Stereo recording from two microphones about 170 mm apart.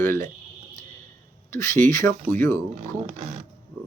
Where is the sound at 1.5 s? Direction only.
15° left (ahead or behind).